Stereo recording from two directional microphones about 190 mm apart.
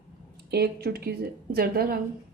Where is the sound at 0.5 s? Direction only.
55° right (ahead or behind).